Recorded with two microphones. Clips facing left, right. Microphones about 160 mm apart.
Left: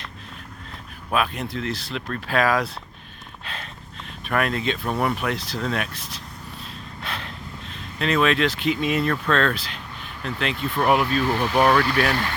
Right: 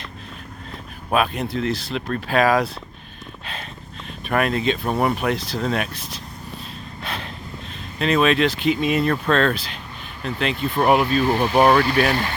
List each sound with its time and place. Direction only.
1.1 s speech: 25° right (ahead or behind)
4.3 s speech: 15° right (ahead or behind)
7.9 s speech: 20° right (ahead or behind)
11.2 s speech: 35° right (ahead or behind)